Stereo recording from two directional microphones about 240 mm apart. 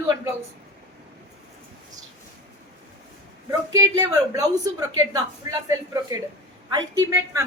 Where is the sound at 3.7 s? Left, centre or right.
Centre.